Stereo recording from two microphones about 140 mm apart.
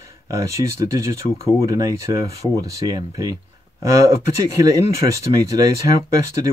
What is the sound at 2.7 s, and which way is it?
Speech, 25° right (ahead or behind).